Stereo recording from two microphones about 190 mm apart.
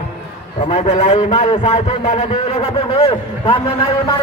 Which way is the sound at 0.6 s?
40° left (ahead or behind).